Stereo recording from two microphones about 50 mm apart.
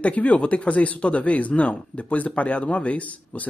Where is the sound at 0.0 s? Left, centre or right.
Left.